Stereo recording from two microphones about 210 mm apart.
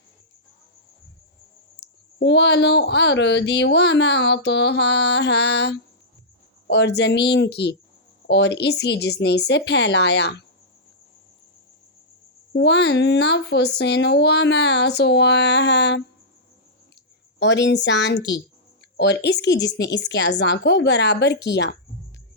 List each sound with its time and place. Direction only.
2.1 s speech: 55° left (ahead or behind)
12.5 s speech: 55° left (ahead or behind)
17.4 s speech: 55° left (ahead or behind)